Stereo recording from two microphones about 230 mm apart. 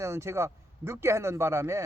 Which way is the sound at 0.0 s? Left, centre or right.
Centre.